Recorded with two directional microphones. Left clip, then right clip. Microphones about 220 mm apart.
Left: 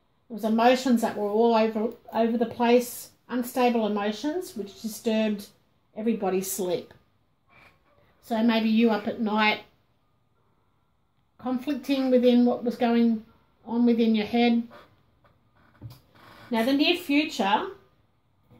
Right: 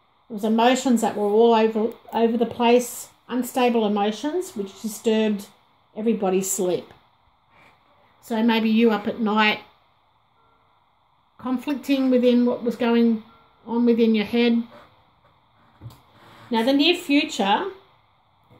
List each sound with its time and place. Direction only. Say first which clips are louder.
0.3 s speech: right 2 dB; 35° right (ahead or behind)
8.3 s speech: right 3 dB; 40° right (ahead or behind)
11.3 s speech: right 3 dB; 40° right (ahead or behind)
16.4 s speech: right 4 dB; 40° right (ahead or behind)